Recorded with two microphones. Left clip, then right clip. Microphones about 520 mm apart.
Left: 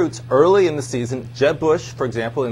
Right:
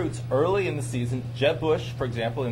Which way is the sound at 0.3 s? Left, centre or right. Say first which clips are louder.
Left 10 dB; left.